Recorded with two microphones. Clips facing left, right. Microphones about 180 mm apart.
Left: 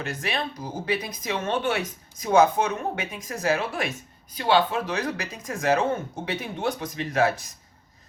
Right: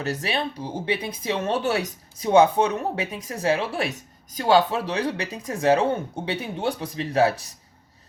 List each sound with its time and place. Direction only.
0.0 s speech: 35° right (ahead or behind)